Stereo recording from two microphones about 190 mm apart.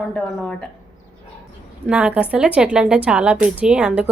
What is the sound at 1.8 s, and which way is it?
A woman's voice, 5° right (ahead or behind).